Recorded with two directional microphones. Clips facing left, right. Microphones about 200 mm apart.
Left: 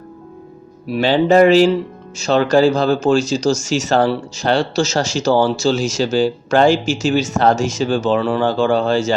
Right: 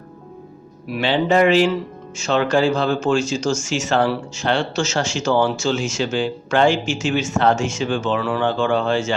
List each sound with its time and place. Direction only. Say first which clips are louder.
0.9 s speech: left 5 dB; 35° left (ahead or behind)